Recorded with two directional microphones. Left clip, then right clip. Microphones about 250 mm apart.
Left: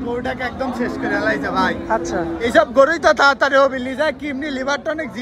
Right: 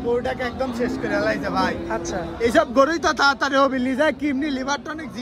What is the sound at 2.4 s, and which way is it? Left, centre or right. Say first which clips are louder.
A man's voice: left 4 dB; right.